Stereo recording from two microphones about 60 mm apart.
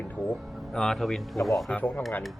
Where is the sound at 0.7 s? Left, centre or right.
Centre.